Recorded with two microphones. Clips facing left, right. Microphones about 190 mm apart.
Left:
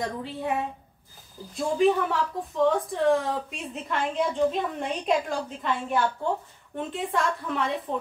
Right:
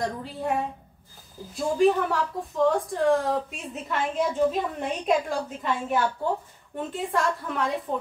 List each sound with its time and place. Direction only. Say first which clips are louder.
0.0 s a woman's voice: right 1 dB; centre (ahead or behind)